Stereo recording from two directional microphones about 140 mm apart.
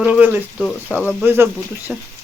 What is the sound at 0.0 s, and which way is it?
Speech, 10° right (ahead or behind).